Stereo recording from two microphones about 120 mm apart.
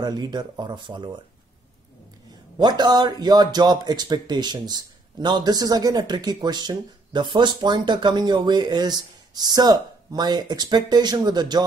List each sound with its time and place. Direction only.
0.0 s speech: 35° right (ahead or behind)
2.5 s speech: 35° right (ahead or behind)